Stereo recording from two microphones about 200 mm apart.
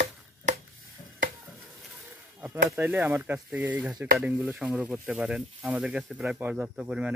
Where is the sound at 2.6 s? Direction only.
10° right (ahead or behind).